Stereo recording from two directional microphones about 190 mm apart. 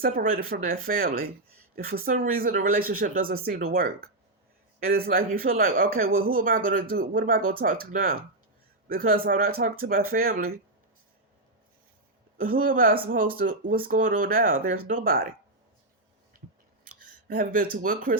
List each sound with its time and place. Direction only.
0.0 s speech: 50° right (ahead or behind)
5.1 s speech: 50° right (ahead or behind)
12.4 s speech: 50° right (ahead or behind)
17.2 s speech: 45° right (ahead or behind)